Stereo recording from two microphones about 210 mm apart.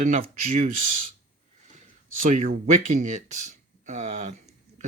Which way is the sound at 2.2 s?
40° right (ahead or behind).